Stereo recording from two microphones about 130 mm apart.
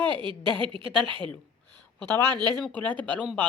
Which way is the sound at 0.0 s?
40° right (ahead or behind).